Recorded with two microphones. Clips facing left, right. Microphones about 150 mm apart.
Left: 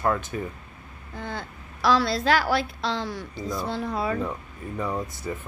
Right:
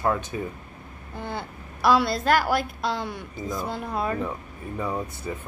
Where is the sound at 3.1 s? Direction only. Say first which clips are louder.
Left 1 dB; 20° right (ahead or behind).